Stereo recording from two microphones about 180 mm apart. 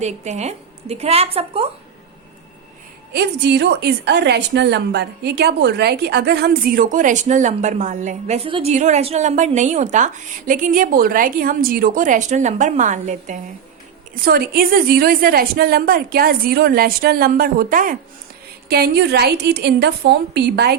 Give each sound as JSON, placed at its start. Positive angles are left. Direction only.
{"t": 0.0, "sound": "a woman's voice", "side_deg": -40}
{"t": 3.1, "sound": "a woman's voice", "side_deg": -65}
{"t": 8.4, "sound": "a woman's voice", "side_deg": -30}
{"t": 8.7, "sound": "a woman's voice", "side_deg": -40}
{"t": 14.2, "sound": "a woman's voice", "side_deg": -55}
{"t": 18.7, "sound": "a woman's voice", "side_deg": -65}